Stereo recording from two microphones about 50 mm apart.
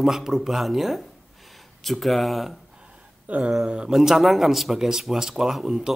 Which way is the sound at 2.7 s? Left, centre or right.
Centre.